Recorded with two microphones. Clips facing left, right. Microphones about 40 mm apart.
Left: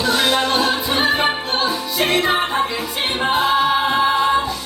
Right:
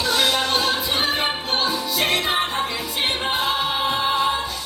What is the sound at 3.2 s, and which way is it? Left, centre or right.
A capella, centre.